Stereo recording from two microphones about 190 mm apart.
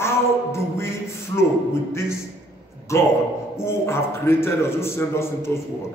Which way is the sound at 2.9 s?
15° left (ahead or behind).